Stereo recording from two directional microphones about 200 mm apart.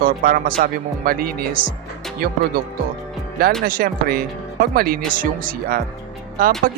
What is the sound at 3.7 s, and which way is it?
Speech, 45° right (ahead or behind).